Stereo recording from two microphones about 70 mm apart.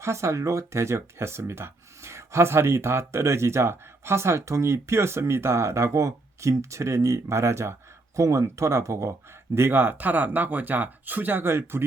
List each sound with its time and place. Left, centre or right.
0.0 s speech: right
9.6 s speech: right